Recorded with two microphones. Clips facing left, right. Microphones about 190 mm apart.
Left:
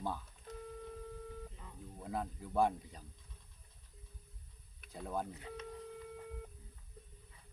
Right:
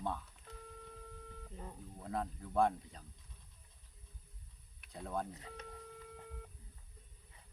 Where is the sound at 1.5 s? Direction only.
40° right (ahead or behind).